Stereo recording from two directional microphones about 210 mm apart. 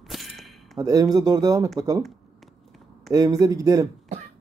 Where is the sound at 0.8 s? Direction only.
20° right (ahead or behind).